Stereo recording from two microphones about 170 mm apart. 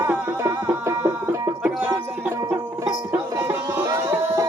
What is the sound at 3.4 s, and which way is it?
Music, 20° right (ahead or behind).